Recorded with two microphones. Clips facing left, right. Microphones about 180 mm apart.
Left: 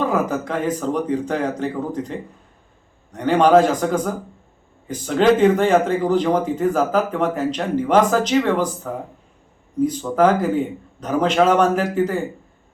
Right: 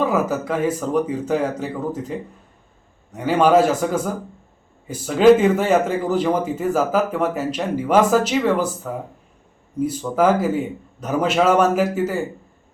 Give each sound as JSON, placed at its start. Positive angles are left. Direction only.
{"t": 0.0, "sound": "a man's voice", "side_deg": -5}
{"t": 10.2, "sound": "a man's voice", "side_deg": -5}